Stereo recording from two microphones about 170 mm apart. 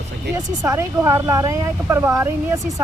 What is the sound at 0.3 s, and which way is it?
Speech, 15° right (ahead or behind).